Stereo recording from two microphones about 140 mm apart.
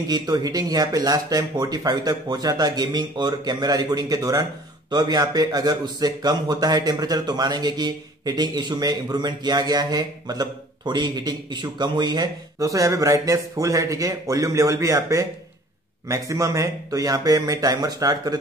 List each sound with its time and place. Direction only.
0.1 s a man's voice: 25° right (ahead or behind)